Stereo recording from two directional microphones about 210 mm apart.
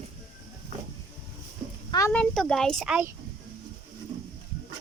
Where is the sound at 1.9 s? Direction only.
15° left (ahead or behind).